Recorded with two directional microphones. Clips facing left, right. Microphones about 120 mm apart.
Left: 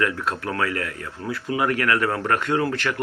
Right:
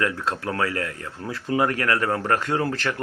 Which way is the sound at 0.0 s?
30° right (ahead or behind).